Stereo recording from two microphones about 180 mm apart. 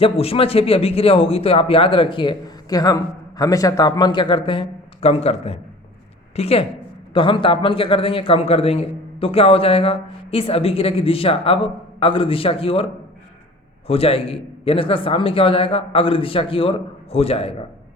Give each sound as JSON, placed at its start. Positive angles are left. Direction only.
{"t": 0.0, "sound": "a man's voice", "side_deg": 30}